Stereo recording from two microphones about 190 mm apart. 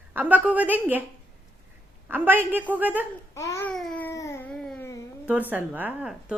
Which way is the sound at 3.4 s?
15° left (ahead or behind).